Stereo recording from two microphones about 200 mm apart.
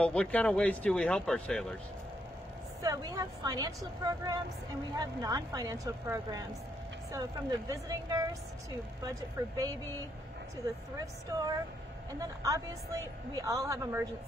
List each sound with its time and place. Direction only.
0.0 s speech: 5° left (ahead or behind)
2.8 s a woman's voice: 20° right (ahead or behind)
9.4 s speech: 15° right (ahead or behind)
11.2 s speech: 20° right (ahead or behind)